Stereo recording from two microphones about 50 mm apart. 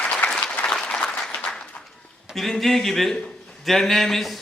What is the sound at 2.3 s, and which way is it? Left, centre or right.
A man's voice, centre.